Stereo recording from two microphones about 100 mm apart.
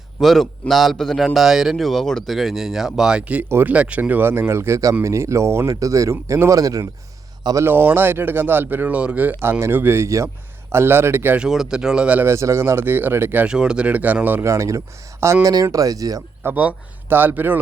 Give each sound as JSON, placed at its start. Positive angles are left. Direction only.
{"t": 0.2, "sound": "a man's voice", "side_deg": 0}
{"t": 7.5, "sound": "speech", "side_deg": -20}
{"t": 9.4, "sound": "speech", "side_deg": -25}
{"t": 11.3, "sound": "speech", "side_deg": -5}
{"t": 12.3, "sound": "speech", "side_deg": -25}
{"t": 14.4, "sound": "speech", "side_deg": -30}
{"t": 16.4, "sound": "speech", "side_deg": -20}